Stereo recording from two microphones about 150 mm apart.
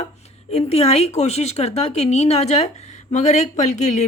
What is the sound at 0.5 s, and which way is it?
Speech, 45° left (ahead or behind).